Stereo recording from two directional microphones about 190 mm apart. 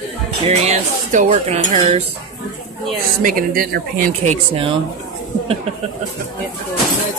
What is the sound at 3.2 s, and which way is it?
Speech, 45° right (ahead or behind).